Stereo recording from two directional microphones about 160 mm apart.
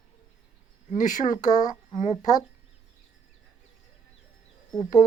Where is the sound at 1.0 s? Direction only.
50° left (ahead or behind).